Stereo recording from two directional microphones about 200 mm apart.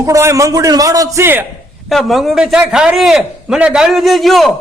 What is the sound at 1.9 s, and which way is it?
A man's voice, centre (ahead or behind).